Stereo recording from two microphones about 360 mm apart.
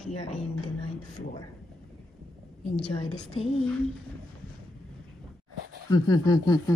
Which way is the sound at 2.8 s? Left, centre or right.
Centre.